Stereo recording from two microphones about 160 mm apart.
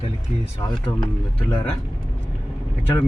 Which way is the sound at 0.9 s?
30° left (ahead or behind).